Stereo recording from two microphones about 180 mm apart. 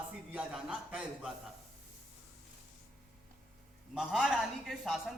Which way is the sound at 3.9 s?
5° right (ahead or behind).